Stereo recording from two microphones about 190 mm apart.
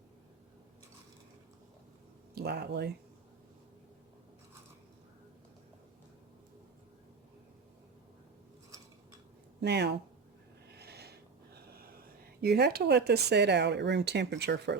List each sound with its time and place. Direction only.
2.3 s speech: 60° right (ahead or behind)
9.6 s speech: 60° right (ahead or behind)
10.7 s a sound: 60° right (ahead or behind)
12.4 s speech: 55° right (ahead or behind)